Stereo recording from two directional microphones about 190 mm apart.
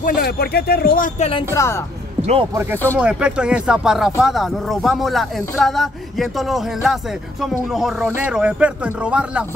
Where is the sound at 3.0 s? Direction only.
5° right (ahead or behind).